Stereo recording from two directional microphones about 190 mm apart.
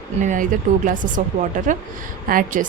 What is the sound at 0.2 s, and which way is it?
Speech, 40° right (ahead or behind).